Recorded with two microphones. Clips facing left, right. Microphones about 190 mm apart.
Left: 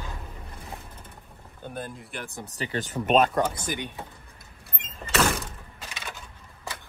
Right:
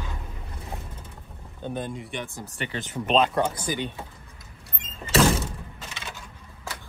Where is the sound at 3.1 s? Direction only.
5° left (ahead or behind).